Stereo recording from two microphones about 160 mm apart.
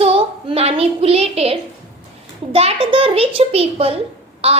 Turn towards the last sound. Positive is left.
turn(degrees=-40)  # may be behind; listen again after turning